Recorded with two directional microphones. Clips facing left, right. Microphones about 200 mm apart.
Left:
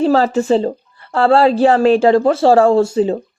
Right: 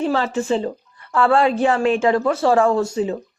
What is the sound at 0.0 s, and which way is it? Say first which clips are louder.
A woman's voice: left 7 dB; 40° left (ahead or behind).